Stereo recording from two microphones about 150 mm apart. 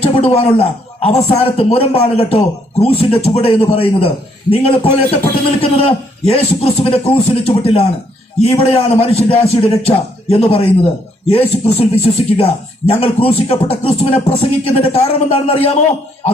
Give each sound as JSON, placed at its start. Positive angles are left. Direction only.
{"t": 0.0, "sound": "a man's voice", "side_deg": 40}